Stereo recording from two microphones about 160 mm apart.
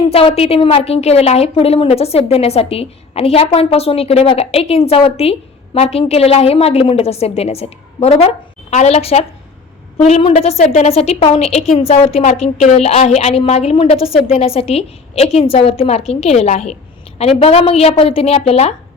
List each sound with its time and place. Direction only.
0.1 s a woman's voice: 35° left (ahead or behind)